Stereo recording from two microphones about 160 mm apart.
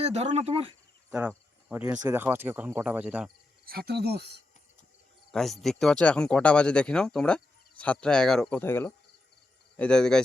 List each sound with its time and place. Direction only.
0.0 s speech: 40° right (ahead or behind)
1.7 s speech: 10° right (ahead or behind)
3.7 s cricket: 80° right
5.3 s speech: centre (ahead or behind)